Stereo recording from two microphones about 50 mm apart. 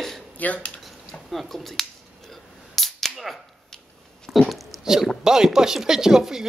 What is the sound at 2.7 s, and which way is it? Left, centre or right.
Cap gun, centre.